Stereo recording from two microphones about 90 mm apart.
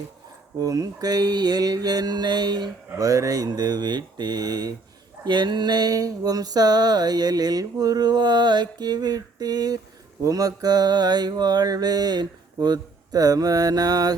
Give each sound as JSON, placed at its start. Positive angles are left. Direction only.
{"t": 0.6, "sound": "mantra", "side_deg": -40}
{"t": 3.0, "sound": "mantra", "side_deg": -40}
{"t": 5.2, "sound": "mantra", "side_deg": -55}